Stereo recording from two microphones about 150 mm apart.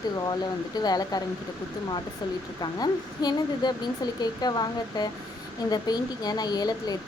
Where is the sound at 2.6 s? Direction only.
25° left (ahead or behind).